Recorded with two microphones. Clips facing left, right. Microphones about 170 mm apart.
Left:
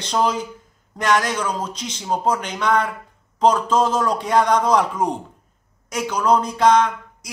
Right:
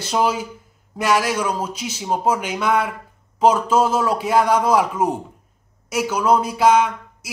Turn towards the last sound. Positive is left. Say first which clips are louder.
# even
turn(degrees=-10)  # may be behind; listen again after turning